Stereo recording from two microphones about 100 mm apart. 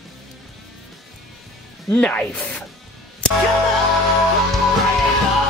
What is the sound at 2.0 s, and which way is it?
Speech, 15° left (ahead or behind).